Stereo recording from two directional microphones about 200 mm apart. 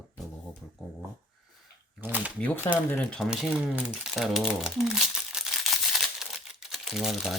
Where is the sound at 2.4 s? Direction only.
10° left (ahead or behind).